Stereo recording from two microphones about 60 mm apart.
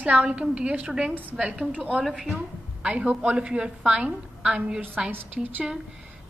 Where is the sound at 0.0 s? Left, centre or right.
Right.